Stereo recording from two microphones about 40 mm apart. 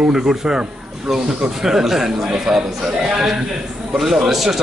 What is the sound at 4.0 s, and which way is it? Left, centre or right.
Speech, centre.